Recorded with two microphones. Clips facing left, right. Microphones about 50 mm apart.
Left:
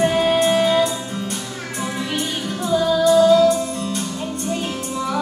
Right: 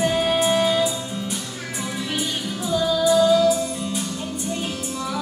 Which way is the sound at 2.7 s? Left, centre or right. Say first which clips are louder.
Left 4 dB; centre.